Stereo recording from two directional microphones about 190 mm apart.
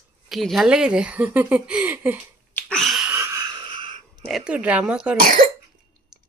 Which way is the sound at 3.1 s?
15° right (ahead or behind).